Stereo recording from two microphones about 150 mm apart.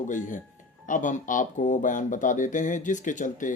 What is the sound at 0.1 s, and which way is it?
Speech, 60° left (ahead or behind).